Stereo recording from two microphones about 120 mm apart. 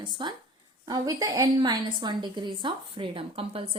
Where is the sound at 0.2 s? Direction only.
40° right (ahead or behind).